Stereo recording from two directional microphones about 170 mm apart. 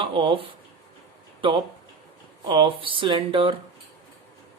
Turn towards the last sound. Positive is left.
turn(degrees=-30)  # may be behind; listen again after turning